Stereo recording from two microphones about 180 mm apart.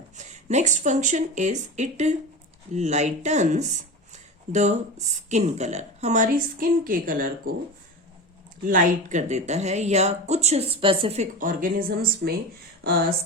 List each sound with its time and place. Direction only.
0.2 s speech: 40° right (ahead or behind)
8.6 s speech: 45° right (ahead or behind)